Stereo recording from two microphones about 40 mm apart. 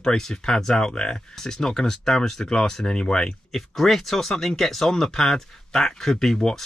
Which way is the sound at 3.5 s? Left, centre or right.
Centre.